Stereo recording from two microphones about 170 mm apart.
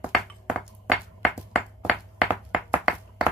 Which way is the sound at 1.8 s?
Centre (ahead or behind).